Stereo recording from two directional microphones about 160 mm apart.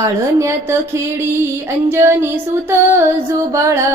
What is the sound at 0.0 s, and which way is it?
Music, 15° right (ahead or behind).